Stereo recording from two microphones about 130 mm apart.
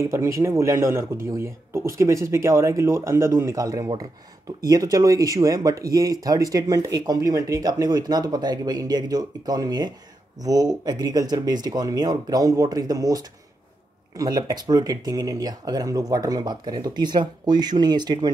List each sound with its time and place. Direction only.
0.1 s speech: 25° right (ahead or behind)